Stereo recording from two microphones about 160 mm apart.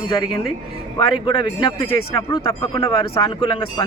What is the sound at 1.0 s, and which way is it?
Speech, 25° left (ahead or behind).